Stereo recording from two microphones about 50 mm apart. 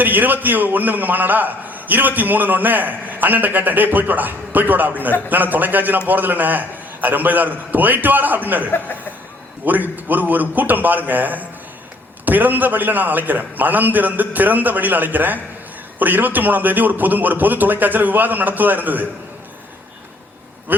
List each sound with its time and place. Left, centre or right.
0.0 s a man's voice: right
20.7 s speech: right